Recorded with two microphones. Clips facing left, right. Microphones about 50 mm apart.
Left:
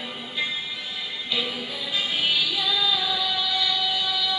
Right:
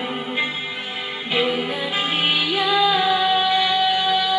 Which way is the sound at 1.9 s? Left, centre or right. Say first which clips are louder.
Right 2 dB; right.